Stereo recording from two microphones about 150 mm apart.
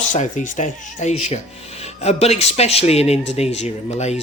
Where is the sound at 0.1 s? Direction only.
55° left (ahead or behind).